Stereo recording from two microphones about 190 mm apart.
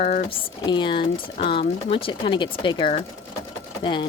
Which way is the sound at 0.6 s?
25° left (ahead or behind).